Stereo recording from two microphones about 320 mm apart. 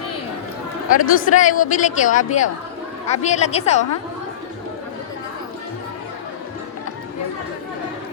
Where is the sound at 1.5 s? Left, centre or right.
Left.